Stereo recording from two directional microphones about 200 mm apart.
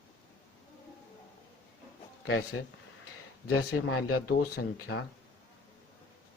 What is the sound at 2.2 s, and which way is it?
Speech, 90° left.